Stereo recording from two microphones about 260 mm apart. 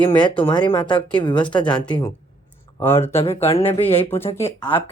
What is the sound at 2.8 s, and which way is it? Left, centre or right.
Speech, centre.